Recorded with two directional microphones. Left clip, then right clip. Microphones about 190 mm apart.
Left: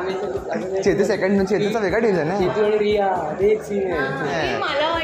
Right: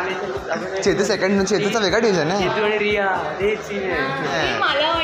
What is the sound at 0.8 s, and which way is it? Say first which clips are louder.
Speech: even; 10° left (ahead or behind).